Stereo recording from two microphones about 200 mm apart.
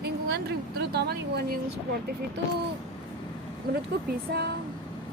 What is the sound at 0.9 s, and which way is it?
Speech, 55° right (ahead or behind).